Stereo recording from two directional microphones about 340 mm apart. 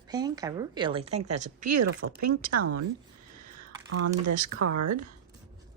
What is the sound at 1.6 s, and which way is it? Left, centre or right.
Speech, right.